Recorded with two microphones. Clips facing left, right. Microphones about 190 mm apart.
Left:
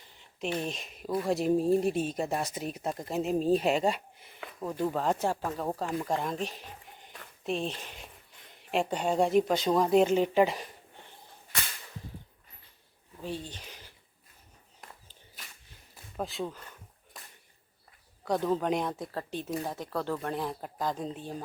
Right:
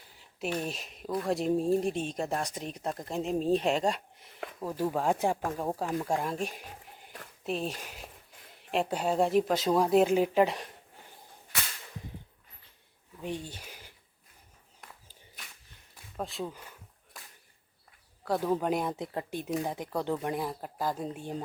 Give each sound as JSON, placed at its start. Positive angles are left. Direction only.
{"t": 0.2, "sound": "a sound", "side_deg": -5}
{"t": 0.6, "sound": "speech", "side_deg": 0}
{"t": 13.2, "sound": "speech", "side_deg": -15}
{"t": 14.8, "sound": "a sound", "side_deg": 0}
{"t": 16.1, "sound": "speech", "side_deg": 0}
{"t": 16.5, "sound": "speech", "side_deg": -10}
{"t": 18.3, "sound": "speech", "side_deg": -5}
{"t": 18.9, "sound": "speech", "side_deg": -20}